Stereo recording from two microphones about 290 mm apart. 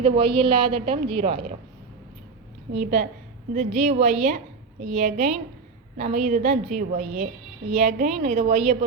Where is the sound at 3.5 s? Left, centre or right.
Right.